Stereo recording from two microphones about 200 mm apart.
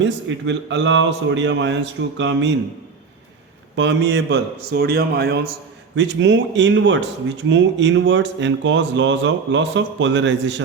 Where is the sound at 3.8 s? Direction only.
60° right (ahead or behind).